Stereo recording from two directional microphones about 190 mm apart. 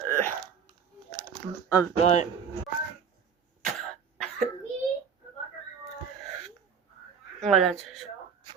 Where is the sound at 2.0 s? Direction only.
35° left (ahead or behind).